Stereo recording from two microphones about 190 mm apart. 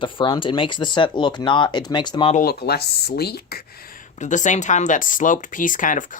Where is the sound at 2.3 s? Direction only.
50° left (ahead or behind).